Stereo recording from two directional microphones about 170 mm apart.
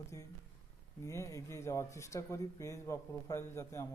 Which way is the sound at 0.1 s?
20° left (ahead or behind).